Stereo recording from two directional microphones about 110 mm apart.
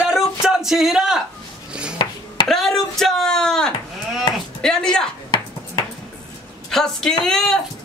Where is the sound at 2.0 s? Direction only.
45° left (ahead or behind).